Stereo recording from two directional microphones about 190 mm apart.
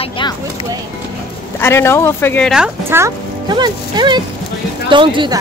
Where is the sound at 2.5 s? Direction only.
10° right (ahead or behind); by 5.4 s 25° right (ahead or behind).